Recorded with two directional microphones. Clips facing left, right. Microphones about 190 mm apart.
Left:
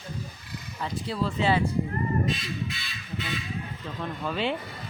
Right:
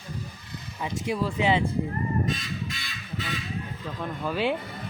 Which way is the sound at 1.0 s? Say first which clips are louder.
Right 2 dB; 15° right (ahead or behind).